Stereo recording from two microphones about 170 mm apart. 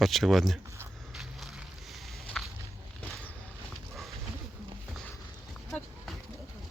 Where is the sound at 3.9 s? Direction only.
Centre (ahead or behind).